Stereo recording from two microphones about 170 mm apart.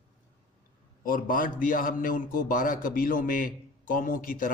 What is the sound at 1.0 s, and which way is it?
A man's voice, 55° left (ahead or behind).